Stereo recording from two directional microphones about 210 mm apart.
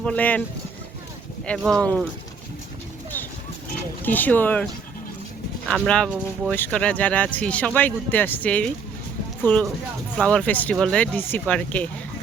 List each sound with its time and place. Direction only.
0.0 s speech: 5° left (ahead or behind)
1.5 s speech: centre (ahead or behind)
4.0 s speech: 10° left (ahead or behind)